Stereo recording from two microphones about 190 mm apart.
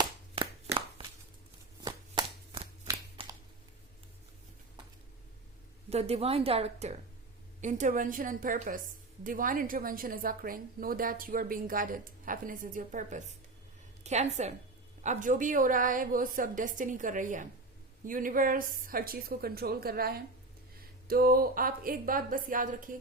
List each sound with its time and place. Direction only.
0.0 s chopping: 25° right (ahead or behind)
5.9 s a woman's voice: 35° right (ahead or behind)